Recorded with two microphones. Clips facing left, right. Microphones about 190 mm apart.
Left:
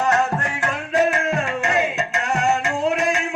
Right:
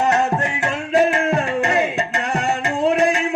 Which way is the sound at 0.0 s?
20° right (ahead or behind).